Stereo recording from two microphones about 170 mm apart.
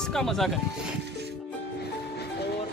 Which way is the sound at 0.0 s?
Centre (ahead or behind).